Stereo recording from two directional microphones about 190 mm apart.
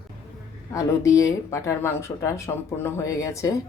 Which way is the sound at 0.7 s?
15° left (ahead or behind).